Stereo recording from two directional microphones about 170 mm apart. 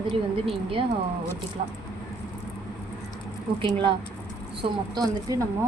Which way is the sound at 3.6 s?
30° right (ahead or behind).